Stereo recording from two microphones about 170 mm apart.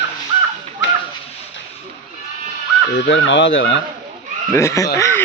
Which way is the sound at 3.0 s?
90° left.